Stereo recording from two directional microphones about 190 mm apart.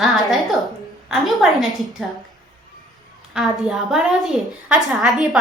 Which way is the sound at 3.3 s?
5° right (ahead or behind).